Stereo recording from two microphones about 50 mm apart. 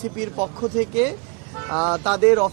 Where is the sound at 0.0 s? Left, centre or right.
Centre.